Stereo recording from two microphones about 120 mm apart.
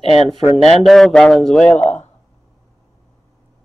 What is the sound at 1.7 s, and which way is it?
Speech, 70° left (ahead or behind).